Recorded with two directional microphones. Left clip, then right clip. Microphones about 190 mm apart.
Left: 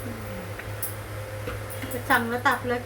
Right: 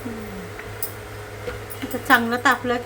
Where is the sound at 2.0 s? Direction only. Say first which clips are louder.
Right 5 dB; 65° right (ahead or behind).